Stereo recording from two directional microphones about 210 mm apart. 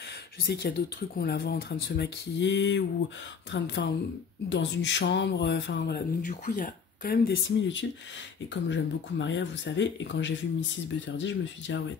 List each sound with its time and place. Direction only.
0.5 s speech: 50° left (ahead or behind)